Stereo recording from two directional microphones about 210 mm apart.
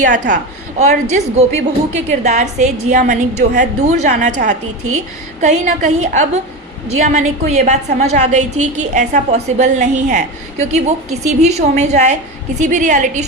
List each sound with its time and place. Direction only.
0.0 s a woman's voice: 40° right (ahead or behind)
5.4 s a woman's voice: 35° right (ahead or behind)